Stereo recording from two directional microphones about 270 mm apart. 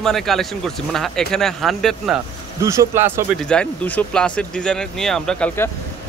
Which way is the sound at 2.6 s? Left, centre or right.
Centre.